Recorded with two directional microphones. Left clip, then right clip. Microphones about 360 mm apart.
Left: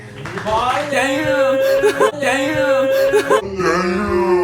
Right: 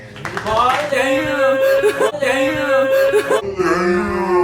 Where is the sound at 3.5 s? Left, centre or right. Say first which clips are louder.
Even; centre.